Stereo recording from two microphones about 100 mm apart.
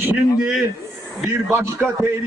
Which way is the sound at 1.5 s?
25° right (ahead or behind).